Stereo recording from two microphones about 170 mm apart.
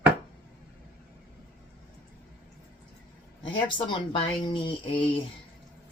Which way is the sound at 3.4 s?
30° left (ahead or behind).